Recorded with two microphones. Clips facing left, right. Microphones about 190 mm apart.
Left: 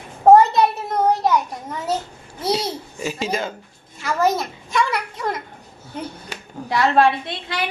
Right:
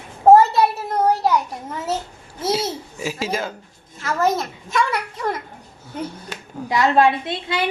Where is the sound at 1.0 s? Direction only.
10° right (ahead or behind).